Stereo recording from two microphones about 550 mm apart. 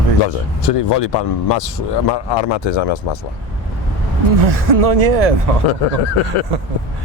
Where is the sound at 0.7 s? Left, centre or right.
Left.